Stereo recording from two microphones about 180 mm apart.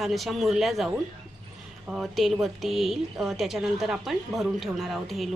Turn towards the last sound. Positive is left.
turn(degrees=0)  # may be behind; listen again after turning